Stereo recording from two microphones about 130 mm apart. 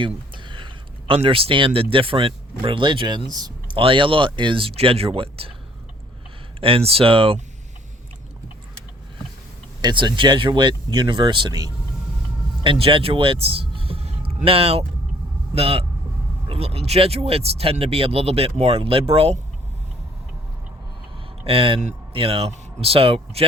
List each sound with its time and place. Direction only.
0.0 s speech: 40° right (ahead or behind)
3.8 s speech: 40° right (ahead or behind)
6.6 s speech: 45° right (ahead or behind)
9.8 s speech: 35° right (ahead or behind)
21.4 s speech: 45° right (ahead or behind)